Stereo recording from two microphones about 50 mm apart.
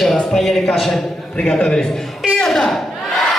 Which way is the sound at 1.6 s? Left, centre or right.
Centre.